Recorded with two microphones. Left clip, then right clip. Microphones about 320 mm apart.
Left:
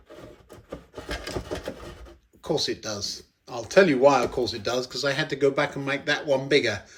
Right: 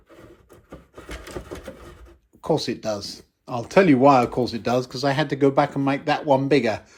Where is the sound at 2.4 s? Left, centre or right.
Centre.